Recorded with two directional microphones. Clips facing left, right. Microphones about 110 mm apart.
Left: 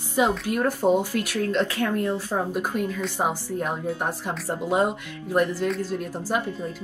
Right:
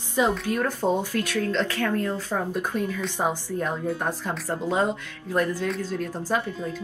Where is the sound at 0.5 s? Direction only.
15° left (ahead or behind).